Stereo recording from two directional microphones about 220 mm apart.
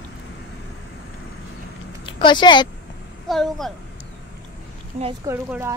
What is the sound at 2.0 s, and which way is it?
Speech, 20° left (ahead or behind).